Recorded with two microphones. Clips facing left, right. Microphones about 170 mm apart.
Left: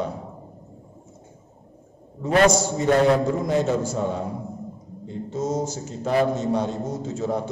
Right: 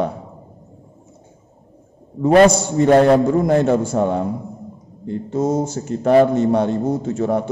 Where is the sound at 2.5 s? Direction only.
60° right (ahead or behind).